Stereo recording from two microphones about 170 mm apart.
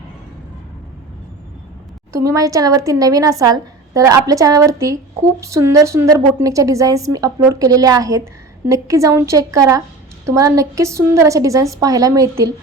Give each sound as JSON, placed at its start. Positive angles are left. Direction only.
{"t": 2.2, "sound": "a woman's voice", "side_deg": -20}